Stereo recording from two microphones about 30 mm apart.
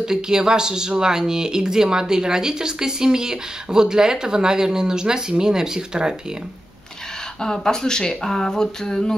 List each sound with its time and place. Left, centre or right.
0.0 s speech: right
7.5 s speech: centre